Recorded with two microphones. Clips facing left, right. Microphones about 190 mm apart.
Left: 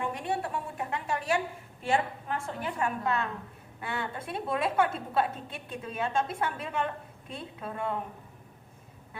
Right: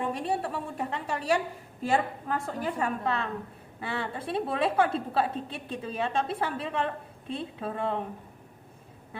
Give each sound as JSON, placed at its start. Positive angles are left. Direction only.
{"t": 0.1, "sound": "a woman's voice", "side_deg": -30}